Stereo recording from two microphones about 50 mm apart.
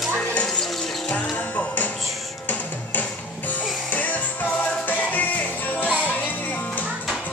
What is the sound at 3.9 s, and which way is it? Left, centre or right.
Music, left.